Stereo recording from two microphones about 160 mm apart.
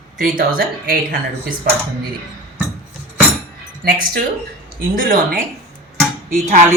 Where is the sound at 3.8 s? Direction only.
70° right (ahead or behind).